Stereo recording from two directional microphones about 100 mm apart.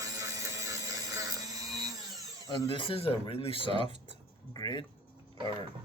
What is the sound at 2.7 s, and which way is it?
Speech, 60° left (ahead or behind).